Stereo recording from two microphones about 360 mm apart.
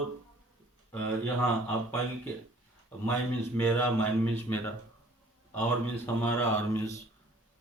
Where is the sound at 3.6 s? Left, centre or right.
Centre.